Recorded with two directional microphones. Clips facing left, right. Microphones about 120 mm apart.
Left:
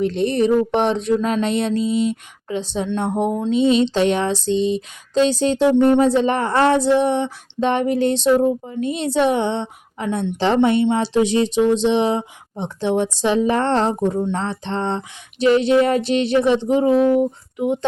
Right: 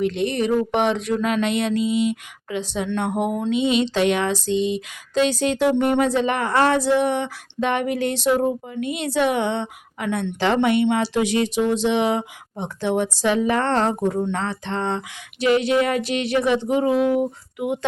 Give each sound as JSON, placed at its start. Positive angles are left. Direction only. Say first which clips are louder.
{"t": 0.0, "sound": "speech", "louder": "left 4 dB", "side_deg": 35}
{"t": 4.4, "sound": "a sound", "louder": "left 3 dB", "side_deg": 30}
{"t": 17.1, "sound": "speech", "louder": "left 4 dB", "side_deg": -10}